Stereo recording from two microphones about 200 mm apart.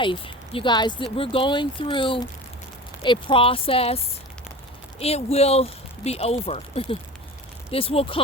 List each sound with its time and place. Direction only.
0.0 s speech: 25° left (ahead or behind)